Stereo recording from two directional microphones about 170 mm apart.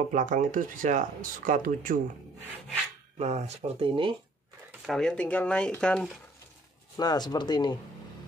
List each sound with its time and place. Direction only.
0.1 s speech: 50° right (ahead or behind)
3.2 s speech: 40° right (ahead or behind)
4.8 s speech: 5° left (ahead or behind)
7.0 s speech: 25° left (ahead or behind)